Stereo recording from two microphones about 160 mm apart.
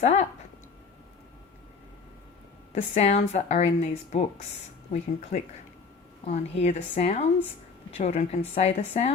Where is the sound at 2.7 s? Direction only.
45° left (ahead or behind).